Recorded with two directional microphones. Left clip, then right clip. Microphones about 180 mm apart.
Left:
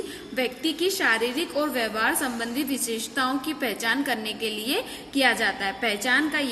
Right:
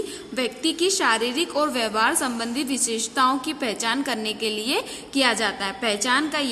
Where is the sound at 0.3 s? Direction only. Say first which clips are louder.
Right 2 dB; 40° right (ahead or behind).